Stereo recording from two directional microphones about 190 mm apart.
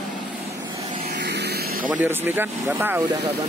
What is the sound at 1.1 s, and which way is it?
Vehicle, 60° right (ahead or behind).